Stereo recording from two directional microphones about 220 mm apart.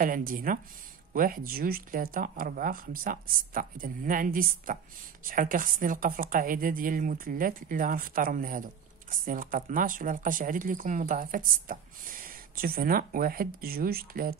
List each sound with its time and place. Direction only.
0.0 s speech: 40° right (ahead or behind)